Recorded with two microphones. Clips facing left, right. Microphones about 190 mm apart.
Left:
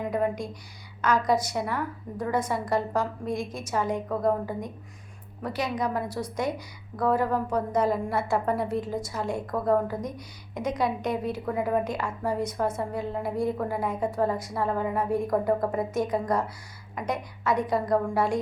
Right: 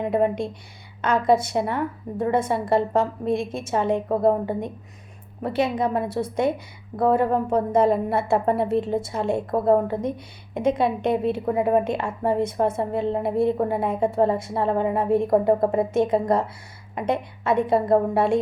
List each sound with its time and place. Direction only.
0.0 s a woman's voice: 25° right (ahead or behind)